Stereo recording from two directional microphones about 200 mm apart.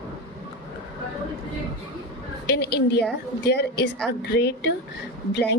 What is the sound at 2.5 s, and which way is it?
A woman's voice, 55° left (ahead or behind).